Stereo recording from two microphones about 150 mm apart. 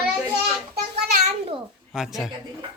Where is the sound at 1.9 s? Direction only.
Centre (ahead or behind).